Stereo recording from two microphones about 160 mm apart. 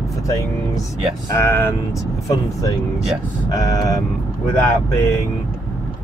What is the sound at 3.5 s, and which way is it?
Speech, 20° left (ahead or behind).